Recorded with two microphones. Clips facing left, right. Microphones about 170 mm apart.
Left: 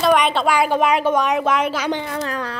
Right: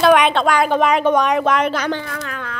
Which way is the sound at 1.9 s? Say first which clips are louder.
Left 2 dB; 20° left (ahead or behind).